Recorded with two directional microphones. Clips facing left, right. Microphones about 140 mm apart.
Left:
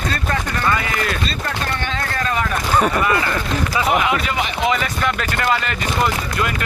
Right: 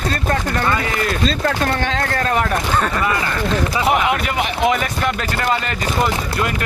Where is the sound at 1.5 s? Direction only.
90° right; by 2.5 s 60° right (ahead or behind).